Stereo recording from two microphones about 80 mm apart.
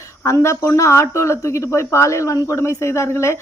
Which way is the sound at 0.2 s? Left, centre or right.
Left.